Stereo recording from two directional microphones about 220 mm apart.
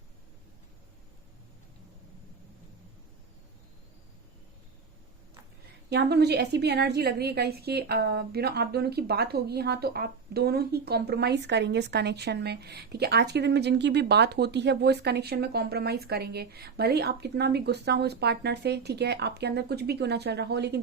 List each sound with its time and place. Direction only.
5.9 s a woman's voice: 50° right (ahead or behind)